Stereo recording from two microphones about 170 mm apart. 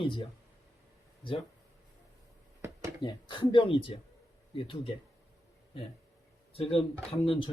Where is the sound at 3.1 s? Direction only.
25° left (ahead or behind).